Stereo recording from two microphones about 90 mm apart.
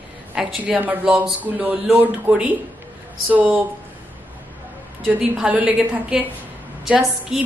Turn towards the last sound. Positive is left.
turn(degrees=-5)  # may be behind; listen again after turning